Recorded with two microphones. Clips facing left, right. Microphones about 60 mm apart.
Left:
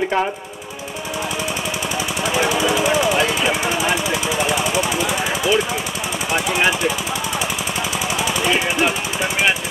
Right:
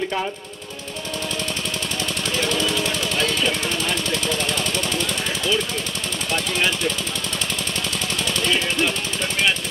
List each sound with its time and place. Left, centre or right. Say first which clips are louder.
2.2 s machine gun: left 5 dB; centre
6.3 s speech: left 5 dB; centre
8.2 s machine gun: left 3 dB; centre